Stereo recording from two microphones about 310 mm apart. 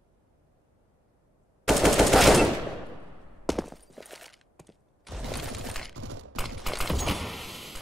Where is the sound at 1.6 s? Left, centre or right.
Centre.